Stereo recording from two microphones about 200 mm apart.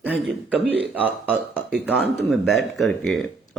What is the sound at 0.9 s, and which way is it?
Speech, 5° right (ahead or behind).